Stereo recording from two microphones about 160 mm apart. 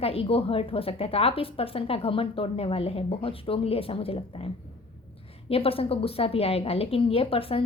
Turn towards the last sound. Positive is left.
turn(degrees=35)  # may be behind; listen again after turning